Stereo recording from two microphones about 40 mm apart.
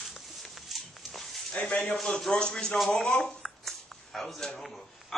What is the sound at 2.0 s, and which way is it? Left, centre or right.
Speech, centre.